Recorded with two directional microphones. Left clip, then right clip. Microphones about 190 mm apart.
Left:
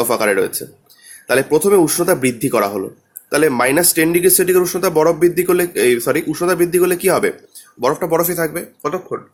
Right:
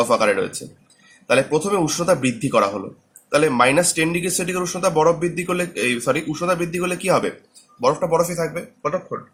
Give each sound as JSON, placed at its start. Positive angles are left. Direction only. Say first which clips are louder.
{"t": 0.0, "sound": "speech", "louder": "left 2 dB", "side_deg": 45}